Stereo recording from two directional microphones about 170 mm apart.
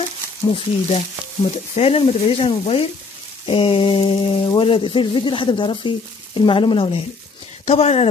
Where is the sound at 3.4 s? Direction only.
30° left (ahead or behind).